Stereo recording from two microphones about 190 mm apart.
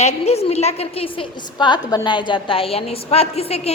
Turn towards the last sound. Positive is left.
turn(degrees=35)  # may be behind; listen again after turning